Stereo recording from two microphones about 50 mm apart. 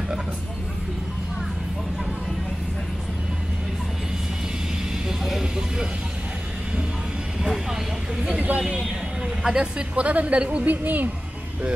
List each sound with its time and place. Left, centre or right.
5.0 s music: centre
8.4 s a sound: right
9.4 s a woman's voice: centre
10.7 s speech: right